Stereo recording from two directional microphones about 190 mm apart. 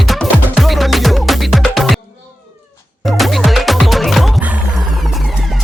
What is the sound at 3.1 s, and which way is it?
Music, centre (ahead or behind).